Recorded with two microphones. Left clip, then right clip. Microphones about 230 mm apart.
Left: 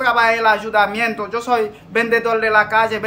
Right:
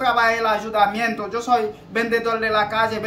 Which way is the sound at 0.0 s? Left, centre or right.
Centre.